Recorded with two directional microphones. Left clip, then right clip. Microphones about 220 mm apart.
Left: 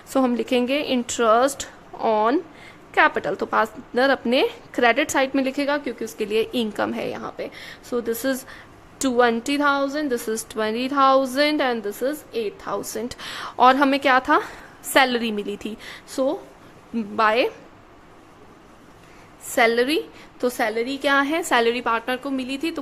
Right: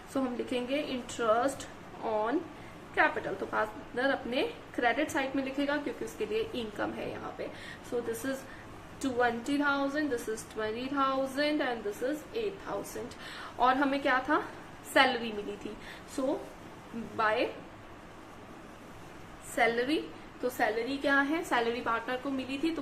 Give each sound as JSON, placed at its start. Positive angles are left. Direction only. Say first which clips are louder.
{"t": 0.1, "sound": "a woman's voice", "louder": "left 13 dB", "side_deg": 50}
{"t": 19.5, "sound": "a woman's voice", "louder": "left 10 dB", "side_deg": 50}